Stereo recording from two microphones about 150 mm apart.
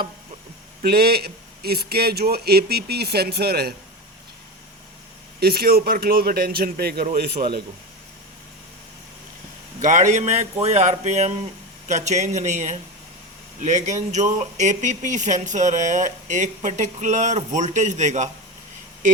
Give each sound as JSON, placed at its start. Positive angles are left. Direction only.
{"t": 0.8, "sound": "a man's voice", "side_deg": -90}
{"t": 5.4, "sound": "a man's voice", "side_deg": -90}
{"t": 9.8, "sound": "a man's voice", "side_deg": -55}